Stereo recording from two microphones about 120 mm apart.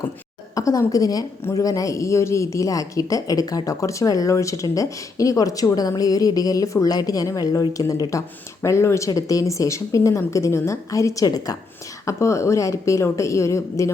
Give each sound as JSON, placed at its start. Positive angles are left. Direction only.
{"t": 0.5, "sound": "a woman's voice", "side_deg": 30}